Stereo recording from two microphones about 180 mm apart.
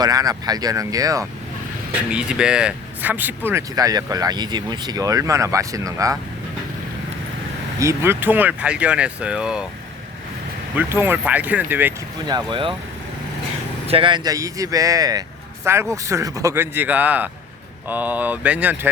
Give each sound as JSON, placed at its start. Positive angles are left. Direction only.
{"t": 0.0, "sound": "speech", "side_deg": -20}
{"t": 2.0, "sound": "speech", "side_deg": -5}
{"t": 7.8, "sound": "speech", "side_deg": -15}
{"t": 10.8, "sound": "speech", "side_deg": -10}
{"t": 12.3, "sound": "speech", "side_deg": -25}
{"t": 13.8, "sound": "speech", "side_deg": -30}